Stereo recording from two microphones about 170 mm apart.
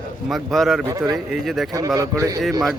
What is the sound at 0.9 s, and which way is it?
Speech, 20° right (ahead or behind).